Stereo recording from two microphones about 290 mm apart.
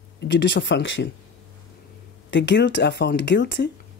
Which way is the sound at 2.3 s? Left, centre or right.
Left.